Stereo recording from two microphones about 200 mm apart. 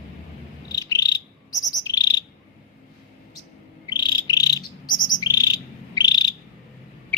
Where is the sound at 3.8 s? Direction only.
20° left (ahead or behind).